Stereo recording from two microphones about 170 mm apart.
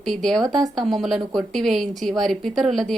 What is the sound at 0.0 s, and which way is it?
A woman's voice, centre (ahead or behind).